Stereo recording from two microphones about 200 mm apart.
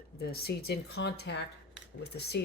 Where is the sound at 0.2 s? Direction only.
50° left (ahead or behind).